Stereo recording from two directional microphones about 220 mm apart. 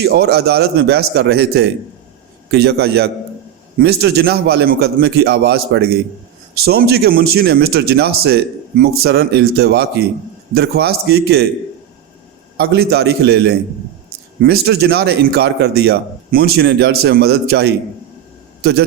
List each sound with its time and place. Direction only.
0.0 s speech: 45° right (ahead or behind)
12.5 s a man's voice: 45° right (ahead or behind)